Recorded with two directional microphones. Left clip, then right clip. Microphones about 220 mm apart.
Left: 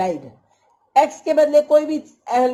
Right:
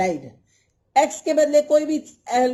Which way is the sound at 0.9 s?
45° right (ahead or behind).